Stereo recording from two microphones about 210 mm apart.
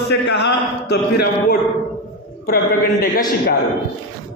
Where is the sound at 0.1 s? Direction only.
55° left (ahead or behind).